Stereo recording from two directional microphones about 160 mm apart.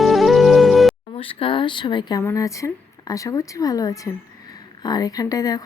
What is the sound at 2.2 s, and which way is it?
Speech, 20° left (ahead or behind).